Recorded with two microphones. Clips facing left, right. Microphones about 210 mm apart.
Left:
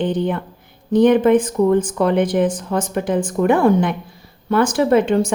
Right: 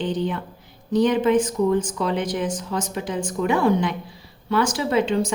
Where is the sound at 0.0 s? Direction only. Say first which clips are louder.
Left 5 dB; 55° left (ahead or behind).